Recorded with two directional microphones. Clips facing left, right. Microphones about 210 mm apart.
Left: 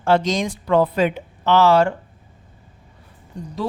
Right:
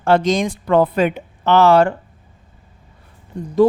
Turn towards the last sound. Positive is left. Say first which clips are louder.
# right 5 dB
turn(degrees=-55)  # may be behind; listen again after turning